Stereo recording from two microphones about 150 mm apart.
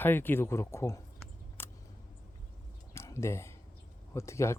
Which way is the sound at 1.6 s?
15° left (ahead or behind).